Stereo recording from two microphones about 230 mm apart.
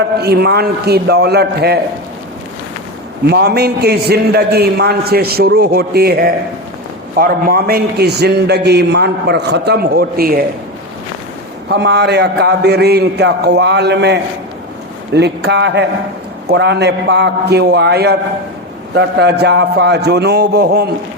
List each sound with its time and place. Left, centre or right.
0.2 s a man's voice: right
3.2 s a man's voice: right
11.7 s a man's voice: right